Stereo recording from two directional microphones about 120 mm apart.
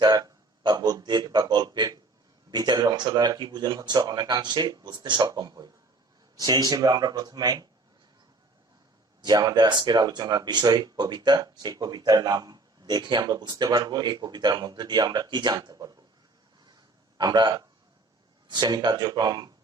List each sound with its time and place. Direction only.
0.0 s speech: 35° right (ahead or behind)
9.2 s speech: 35° right (ahead or behind)
17.2 s speech: 35° right (ahead or behind)